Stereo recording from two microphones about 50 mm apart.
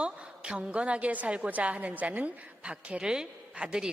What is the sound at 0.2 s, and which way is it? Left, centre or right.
A woman's voice, centre.